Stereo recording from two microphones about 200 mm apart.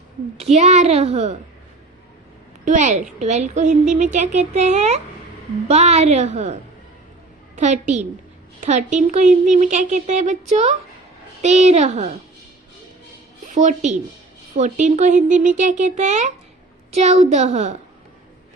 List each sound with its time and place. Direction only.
0.3 s a woman's voice: 35° right (ahead or behind)
2.6 s a woman's voice: 35° right (ahead or behind)
13.5 s a woman's voice: 35° right (ahead or behind)